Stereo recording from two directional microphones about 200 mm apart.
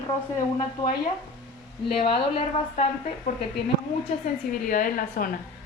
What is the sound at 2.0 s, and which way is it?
Speech, 25° left (ahead or behind).